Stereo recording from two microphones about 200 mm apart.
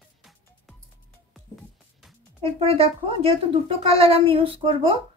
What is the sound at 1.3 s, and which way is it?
Music, centre (ahead or behind).